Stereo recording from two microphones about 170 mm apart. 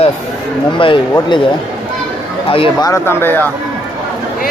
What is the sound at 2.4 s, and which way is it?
Speech, 30° left (ahead or behind).